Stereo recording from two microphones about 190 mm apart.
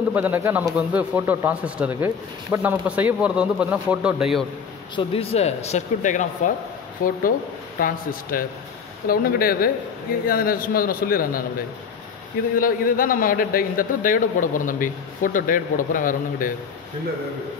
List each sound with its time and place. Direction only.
0.1 s speech: 10° right (ahead or behind)
4.9 s a man's voice: 30° left (ahead or behind); by 11.4 s 50° left (ahead or behind)
12.5 s a man's voice: 50° left (ahead or behind)